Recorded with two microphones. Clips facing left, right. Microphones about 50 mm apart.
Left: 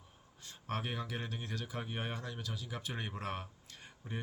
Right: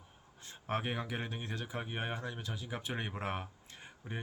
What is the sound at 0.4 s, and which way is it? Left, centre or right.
Speech, right.